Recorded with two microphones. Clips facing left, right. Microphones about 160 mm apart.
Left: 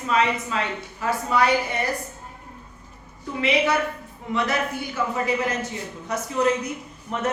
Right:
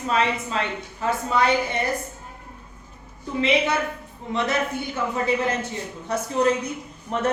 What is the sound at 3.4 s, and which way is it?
A woman's voice, 25° right (ahead or behind).